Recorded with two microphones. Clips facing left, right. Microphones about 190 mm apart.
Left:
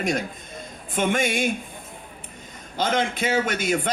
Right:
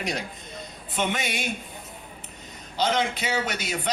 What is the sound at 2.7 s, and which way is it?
A man's voice, 50° left (ahead or behind).